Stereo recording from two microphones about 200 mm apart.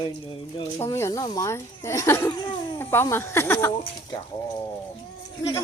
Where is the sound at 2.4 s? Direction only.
25° left (ahead or behind).